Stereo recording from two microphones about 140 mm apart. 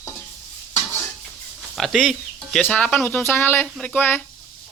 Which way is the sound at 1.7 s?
Centre (ahead or behind).